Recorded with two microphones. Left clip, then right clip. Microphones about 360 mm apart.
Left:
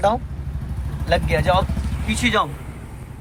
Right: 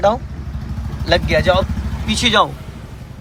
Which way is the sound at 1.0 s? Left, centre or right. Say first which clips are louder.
Right 5 dB; centre.